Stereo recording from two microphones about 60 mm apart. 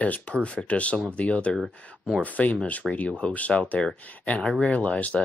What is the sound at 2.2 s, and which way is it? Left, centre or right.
Speech, left.